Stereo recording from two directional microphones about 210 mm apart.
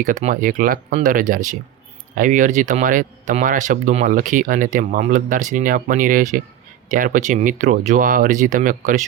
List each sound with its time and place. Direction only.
0.0 s speech: 35° right (ahead or behind)